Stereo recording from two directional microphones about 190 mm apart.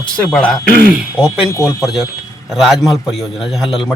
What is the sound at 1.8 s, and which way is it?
Speech, centre (ahead or behind).